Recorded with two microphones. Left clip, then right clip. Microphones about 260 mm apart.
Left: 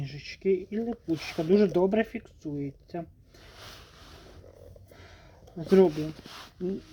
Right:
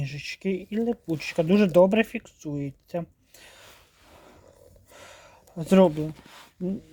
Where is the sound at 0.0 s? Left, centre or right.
Right.